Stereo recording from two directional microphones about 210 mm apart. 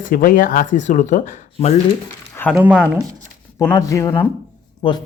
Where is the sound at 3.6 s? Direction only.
15° left (ahead or behind).